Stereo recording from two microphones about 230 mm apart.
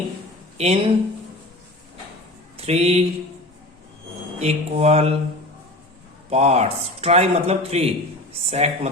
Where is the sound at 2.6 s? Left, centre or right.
Right.